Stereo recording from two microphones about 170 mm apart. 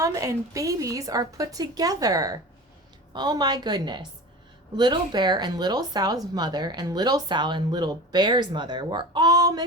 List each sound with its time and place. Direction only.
0.0 s speech: 20° right (ahead or behind)